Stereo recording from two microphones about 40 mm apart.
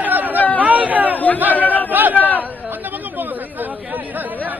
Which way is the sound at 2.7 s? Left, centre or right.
Right.